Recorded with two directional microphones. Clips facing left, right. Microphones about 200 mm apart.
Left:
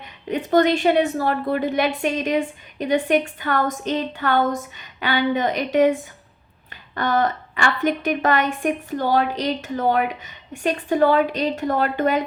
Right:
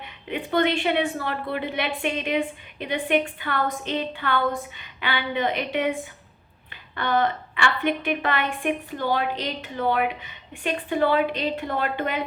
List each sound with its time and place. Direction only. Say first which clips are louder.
0.3 s a woman's voice: left 5 dB; 40° left (ahead or behind)